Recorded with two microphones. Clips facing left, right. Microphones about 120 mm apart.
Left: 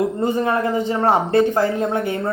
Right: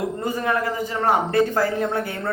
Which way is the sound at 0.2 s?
25° left (ahead or behind).